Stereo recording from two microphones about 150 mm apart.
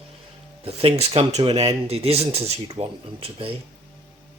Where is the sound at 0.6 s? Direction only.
40° right (ahead or behind).